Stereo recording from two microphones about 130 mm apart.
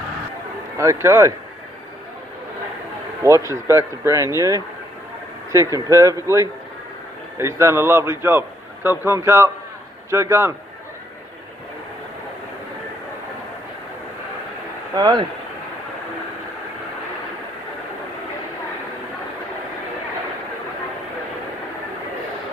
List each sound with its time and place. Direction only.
0.8 s speech: 20° right (ahead or behind)
3.2 s a man's voice: 20° right (ahead or behind)
14.9 s speech: 35° right (ahead or behind)